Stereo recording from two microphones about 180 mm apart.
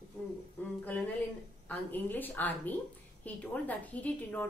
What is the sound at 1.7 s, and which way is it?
A woman's voice, 10° left (ahead or behind).